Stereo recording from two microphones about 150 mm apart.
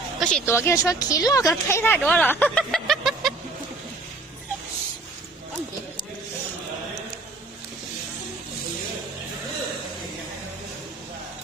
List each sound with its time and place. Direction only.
0.2 s speech: 5° left (ahead or behind)
0.4 s speech: 15° left (ahead or behind); by 3.3 s centre (ahead or behind)